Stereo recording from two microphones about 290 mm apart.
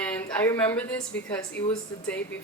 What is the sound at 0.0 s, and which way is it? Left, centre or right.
A woman's voice, centre.